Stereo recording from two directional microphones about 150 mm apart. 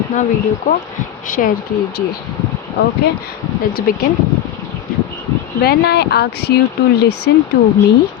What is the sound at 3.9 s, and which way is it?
Speech, 75° left (ahead or behind).